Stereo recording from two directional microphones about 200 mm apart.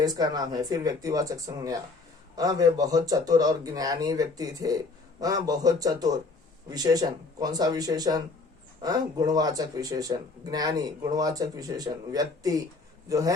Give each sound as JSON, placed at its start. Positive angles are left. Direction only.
{"t": 0.0, "sound": "a man's voice", "side_deg": -20}